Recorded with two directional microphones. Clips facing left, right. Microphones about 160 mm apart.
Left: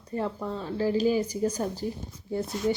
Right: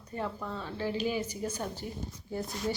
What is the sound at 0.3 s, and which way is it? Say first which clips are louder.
Speech: left 6 dB; 30° left (ahead or behind).